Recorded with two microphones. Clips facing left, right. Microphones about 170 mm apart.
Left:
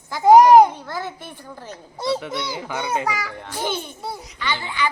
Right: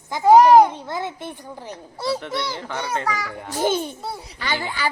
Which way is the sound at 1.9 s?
20° left (ahead or behind).